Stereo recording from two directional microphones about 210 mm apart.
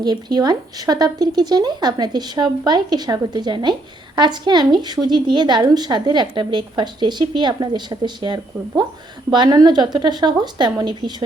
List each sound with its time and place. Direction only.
0.0 s speech: 20° right (ahead or behind)